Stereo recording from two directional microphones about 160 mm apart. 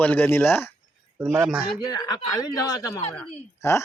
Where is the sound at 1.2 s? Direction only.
5° right (ahead or behind).